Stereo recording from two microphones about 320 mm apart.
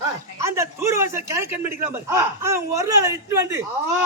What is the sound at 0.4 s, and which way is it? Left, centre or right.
A man's voice, centre.